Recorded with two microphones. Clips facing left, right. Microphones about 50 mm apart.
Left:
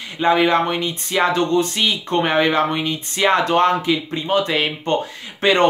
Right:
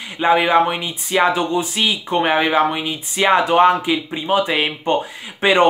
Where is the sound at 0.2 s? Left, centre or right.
Centre.